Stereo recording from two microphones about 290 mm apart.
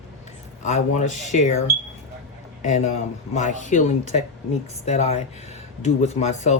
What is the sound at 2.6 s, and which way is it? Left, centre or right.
Speech, left.